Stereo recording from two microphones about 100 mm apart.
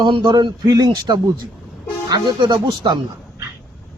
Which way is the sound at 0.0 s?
50° right (ahead or behind).